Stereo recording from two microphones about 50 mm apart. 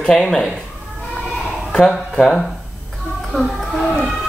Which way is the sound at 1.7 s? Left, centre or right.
Centre.